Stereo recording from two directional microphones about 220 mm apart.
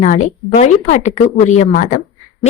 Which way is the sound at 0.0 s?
35° left (ahead or behind).